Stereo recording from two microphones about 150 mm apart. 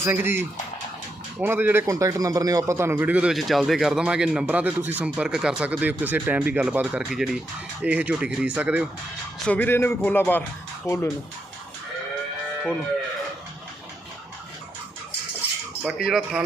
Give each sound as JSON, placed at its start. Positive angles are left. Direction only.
{"t": 0.0, "sound": "a man's voice", "side_deg": -15}
{"t": 9.5, "sound": "speech", "side_deg": 15}
{"t": 15.8, "sound": "speech", "side_deg": -5}